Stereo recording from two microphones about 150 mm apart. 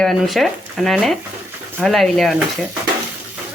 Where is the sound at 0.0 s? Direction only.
Centre (ahead or behind).